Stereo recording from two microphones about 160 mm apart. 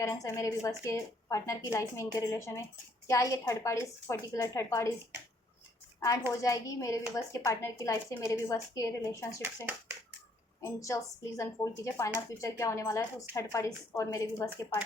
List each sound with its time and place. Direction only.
0.0 s a woman's voice: 20° left (ahead or behind)
6.4 s a woman's voice: 20° left (ahead or behind)
10.6 s a woman's voice: 20° left (ahead or behind)